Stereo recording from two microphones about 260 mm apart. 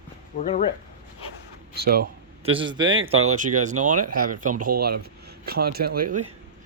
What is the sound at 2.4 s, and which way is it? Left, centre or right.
Speech, centre.